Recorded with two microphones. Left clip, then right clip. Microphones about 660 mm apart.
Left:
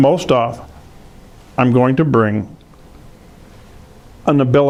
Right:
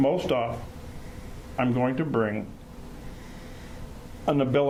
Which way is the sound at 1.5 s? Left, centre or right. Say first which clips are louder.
Left 12 dB; left.